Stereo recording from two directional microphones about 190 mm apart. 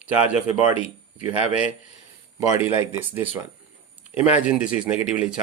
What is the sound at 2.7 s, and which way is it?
Speech, 25° left (ahead or behind).